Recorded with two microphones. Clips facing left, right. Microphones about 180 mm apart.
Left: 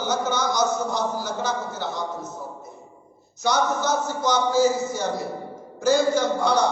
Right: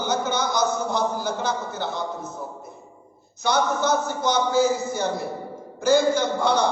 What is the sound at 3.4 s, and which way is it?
A man's voice, 55° right (ahead or behind).